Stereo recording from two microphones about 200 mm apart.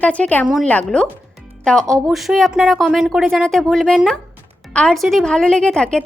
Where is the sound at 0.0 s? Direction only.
5° left (ahead or behind).